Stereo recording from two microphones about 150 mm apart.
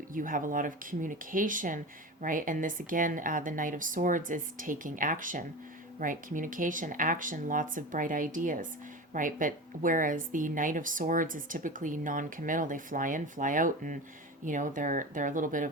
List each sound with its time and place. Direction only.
0.1 s a woman's voice: 65° right (ahead or behind)